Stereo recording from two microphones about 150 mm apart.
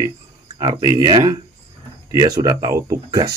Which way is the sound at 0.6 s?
30° right (ahead or behind).